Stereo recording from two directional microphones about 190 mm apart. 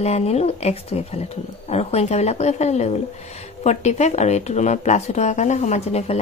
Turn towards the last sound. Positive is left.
turn(degrees=35)  # may be behind; listen again after turning